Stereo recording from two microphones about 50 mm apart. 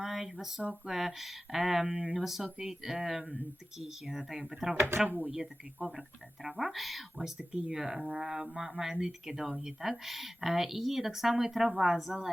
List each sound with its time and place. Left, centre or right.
0.0 s speech: centre
4.8 s speech: right
5.3 s speech: centre